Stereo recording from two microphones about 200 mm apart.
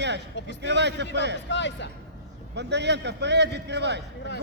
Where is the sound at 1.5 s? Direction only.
60° left (ahead or behind).